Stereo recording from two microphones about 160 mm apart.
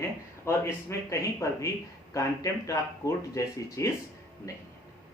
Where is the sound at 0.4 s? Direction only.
15° left (ahead or behind).